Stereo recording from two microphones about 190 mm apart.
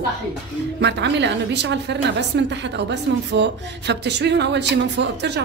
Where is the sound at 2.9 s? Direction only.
65° right (ahead or behind).